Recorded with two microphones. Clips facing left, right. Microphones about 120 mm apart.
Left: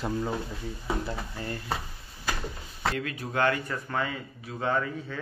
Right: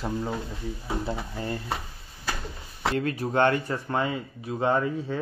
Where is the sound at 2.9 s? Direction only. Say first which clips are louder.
Right 6 dB; 35° right (ahead or behind).